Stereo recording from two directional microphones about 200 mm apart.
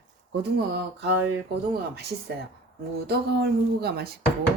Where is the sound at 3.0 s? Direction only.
55° right (ahead or behind).